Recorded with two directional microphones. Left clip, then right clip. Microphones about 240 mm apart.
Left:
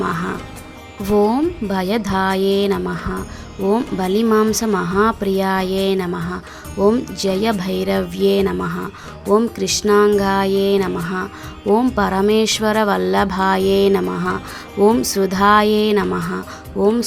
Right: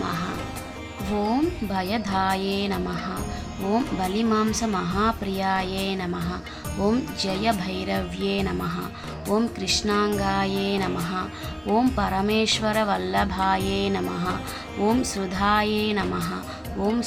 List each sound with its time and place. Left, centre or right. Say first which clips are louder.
0.0 s music: left 7 dB; left
1.0 s speech: left 9 dB; left